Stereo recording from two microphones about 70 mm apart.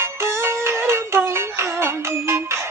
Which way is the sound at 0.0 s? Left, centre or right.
Right.